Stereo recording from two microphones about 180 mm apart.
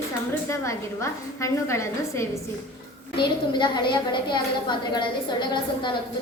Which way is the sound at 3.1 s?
25° left (ahead or behind).